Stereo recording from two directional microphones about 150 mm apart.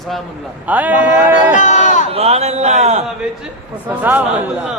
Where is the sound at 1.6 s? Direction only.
55° left (ahead or behind).